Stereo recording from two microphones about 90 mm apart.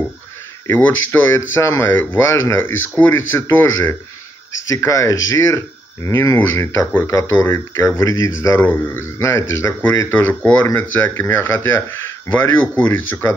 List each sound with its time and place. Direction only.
0.7 s speech: 20° left (ahead or behind)
4.6 s speech: 35° left (ahead or behind)